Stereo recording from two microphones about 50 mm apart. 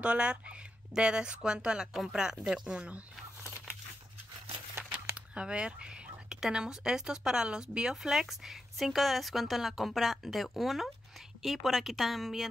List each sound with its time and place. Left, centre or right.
0.0 s speech: right
5.3 s a sound: centre
6.4 s speech: centre